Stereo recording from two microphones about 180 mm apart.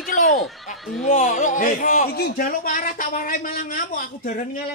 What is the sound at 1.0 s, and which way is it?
A woman's voice, 45° left (ahead or behind).